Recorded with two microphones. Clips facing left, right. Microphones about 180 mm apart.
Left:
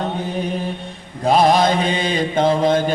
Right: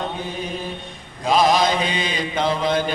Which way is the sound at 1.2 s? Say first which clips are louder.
Left 3 dB; 55° left (ahead or behind).